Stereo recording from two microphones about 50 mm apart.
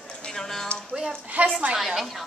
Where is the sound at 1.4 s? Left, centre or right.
Right.